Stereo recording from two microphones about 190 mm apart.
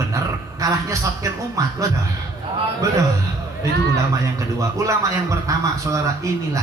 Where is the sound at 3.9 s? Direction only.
15° right (ahead or behind).